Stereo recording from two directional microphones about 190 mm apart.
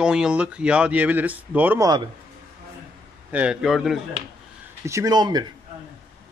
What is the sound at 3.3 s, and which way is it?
Speech, 5° right (ahead or behind).